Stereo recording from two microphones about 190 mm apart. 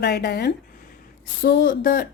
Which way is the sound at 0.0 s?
60° left (ahead or behind).